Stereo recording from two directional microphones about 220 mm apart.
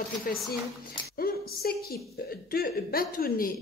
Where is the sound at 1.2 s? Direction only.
45° left (ahead or behind).